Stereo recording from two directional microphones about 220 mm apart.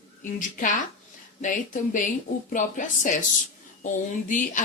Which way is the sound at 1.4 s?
35° left (ahead or behind).